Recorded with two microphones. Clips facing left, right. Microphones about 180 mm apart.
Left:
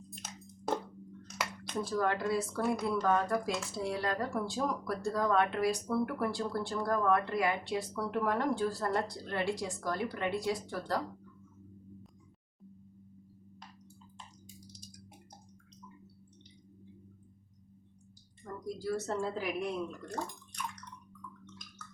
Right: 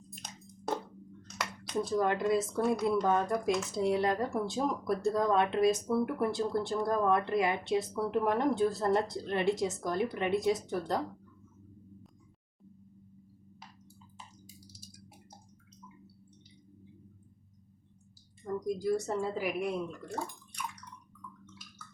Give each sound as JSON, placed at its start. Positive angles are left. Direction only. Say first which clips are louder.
{"t": 0.2, "sound": "squish", "louder": "even", "side_deg": 5}
{"t": 1.8, "sound": "speech", "louder": "right 3 dB", "side_deg": -20}
{"t": 14.4, "sound": "a sound", "louder": "left 1 dB", "side_deg": -5}
{"t": 18.6, "sound": "speech", "louder": "right 4 dB", "side_deg": -15}